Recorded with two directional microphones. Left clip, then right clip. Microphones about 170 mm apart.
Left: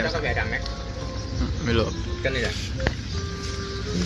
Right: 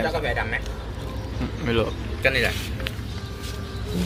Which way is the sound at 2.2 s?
20° left (ahead or behind).